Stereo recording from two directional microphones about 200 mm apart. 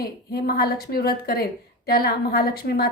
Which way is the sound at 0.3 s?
50° left (ahead or behind).